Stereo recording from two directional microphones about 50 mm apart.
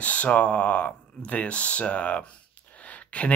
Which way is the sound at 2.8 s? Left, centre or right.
Left.